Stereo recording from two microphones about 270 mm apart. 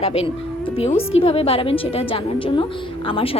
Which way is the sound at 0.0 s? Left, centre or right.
Left.